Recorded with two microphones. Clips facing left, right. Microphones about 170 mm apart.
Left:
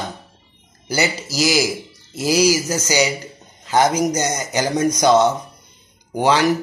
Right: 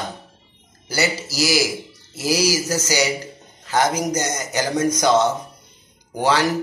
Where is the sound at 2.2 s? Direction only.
20° left (ahead or behind).